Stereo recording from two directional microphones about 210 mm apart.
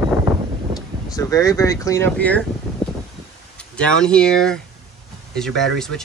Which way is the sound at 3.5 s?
5° left (ahead or behind).